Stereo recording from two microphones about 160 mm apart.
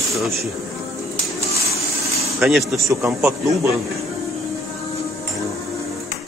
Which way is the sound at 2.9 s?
20° right (ahead or behind).